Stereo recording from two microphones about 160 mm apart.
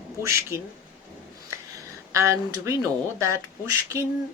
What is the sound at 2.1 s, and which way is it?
Speech, 20° right (ahead or behind).